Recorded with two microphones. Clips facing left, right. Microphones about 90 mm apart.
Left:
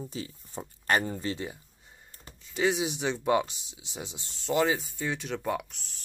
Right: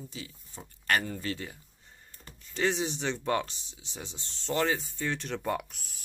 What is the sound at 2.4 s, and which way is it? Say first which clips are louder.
Speech: left 2 dB; 10° left (ahead or behind).